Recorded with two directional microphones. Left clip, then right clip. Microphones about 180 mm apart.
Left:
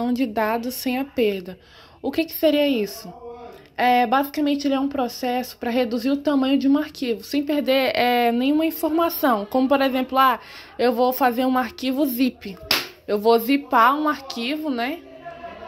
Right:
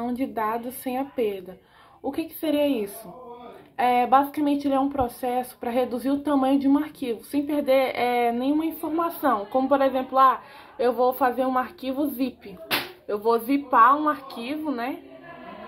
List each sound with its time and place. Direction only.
0.0 s speech: 35° left (ahead or behind)